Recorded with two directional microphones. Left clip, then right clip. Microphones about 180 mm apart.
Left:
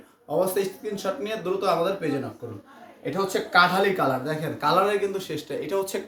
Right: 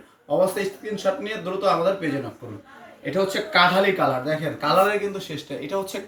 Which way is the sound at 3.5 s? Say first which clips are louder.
Right 1 dB; 50° left (ahead or behind).